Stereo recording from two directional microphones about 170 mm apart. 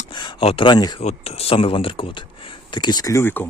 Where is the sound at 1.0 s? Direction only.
35° left (ahead or behind).